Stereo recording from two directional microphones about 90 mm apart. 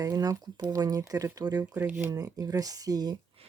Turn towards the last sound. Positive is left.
turn(degrees=-45)  # may be behind; listen again after turning